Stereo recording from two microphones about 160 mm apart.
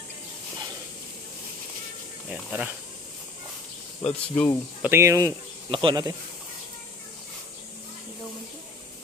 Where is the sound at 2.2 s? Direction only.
5° right (ahead or behind).